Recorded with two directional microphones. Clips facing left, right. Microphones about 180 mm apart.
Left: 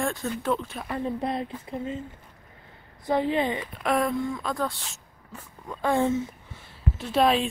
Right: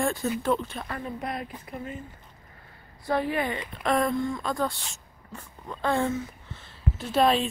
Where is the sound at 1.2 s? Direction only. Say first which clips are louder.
Left 4 dB; 25° left (ahead or behind).